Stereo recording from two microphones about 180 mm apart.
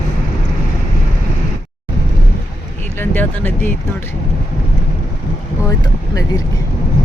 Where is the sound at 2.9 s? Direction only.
10° left (ahead or behind).